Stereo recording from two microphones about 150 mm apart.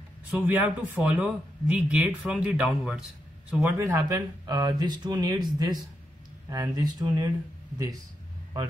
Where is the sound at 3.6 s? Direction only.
20° right (ahead or behind).